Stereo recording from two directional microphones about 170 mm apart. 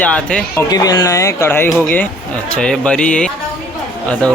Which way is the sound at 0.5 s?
20° left (ahead or behind).